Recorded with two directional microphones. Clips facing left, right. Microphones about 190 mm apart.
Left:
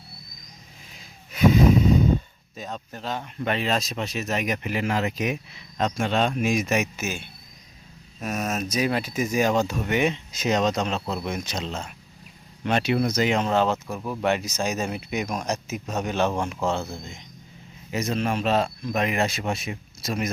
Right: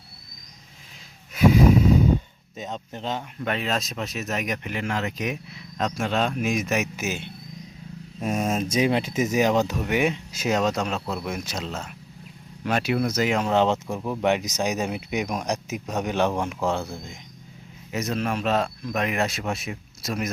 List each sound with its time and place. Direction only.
2.6 s speech: 20° right (ahead or behind)
3.4 s speech: centre (ahead or behind)
6.9 s speech: 20° right (ahead or behind)
13.5 s speech: 15° right (ahead or behind)
17.9 s speech: centre (ahead or behind)